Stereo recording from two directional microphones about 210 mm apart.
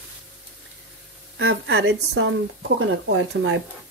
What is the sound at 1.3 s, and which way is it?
Speech, 60° right (ahead or behind).